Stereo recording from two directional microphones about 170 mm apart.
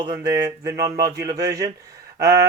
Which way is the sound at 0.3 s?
20° right (ahead or behind).